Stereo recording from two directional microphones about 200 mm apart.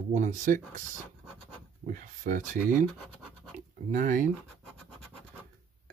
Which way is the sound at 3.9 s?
40° right (ahead or behind).